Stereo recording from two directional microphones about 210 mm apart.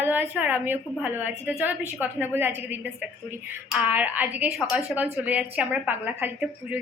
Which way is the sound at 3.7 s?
5° right (ahead or behind).